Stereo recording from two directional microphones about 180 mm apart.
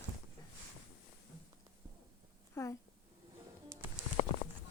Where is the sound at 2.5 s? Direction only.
15° left (ahead or behind).